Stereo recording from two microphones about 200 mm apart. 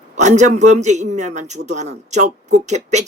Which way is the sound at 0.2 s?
35° right (ahead or behind).